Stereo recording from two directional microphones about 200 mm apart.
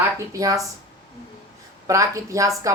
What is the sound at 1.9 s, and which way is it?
Speech, 15° right (ahead or behind).